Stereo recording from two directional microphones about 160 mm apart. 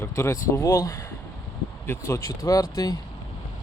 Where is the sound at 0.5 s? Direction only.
20° left (ahead or behind).